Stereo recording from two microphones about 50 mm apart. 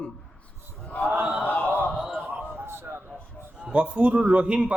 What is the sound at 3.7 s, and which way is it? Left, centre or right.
A man's voice, right.